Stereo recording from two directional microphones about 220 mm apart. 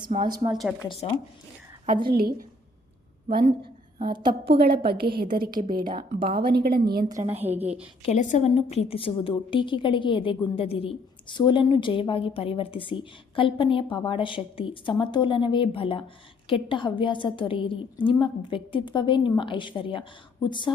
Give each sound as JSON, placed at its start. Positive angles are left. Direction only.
{"t": 0.0, "sound": "a woman's voice", "side_deg": -25}
{"t": 0.5, "sound": "a woman's voice", "side_deg": 0}
{"t": 0.8, "sound": "a woman's voice", "side_deg": 20}
{"t": 2.0, "sound": "a woman's voice", "side_deg": -45}
{"t": 3.9, "sound": "a woman's voice", "side_deg": -20}
{"t": 4.3, "sound": "a woman's voice", "side_deg": -45}
{"t": 8.0, "sound": "a woman's voice", "side_deg": 35}